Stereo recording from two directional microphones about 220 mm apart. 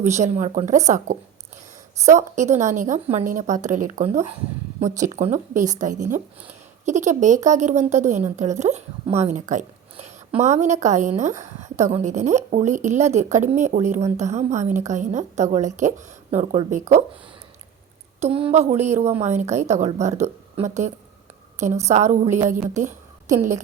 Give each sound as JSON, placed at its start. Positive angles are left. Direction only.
{"t": 0.0, "sound": "a woman's voice", "side_deg": -30}
{"t": 18.2, "sound": "a woman's voice", "side_deg": -25}